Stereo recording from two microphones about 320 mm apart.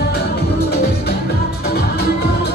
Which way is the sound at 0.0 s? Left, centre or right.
Left.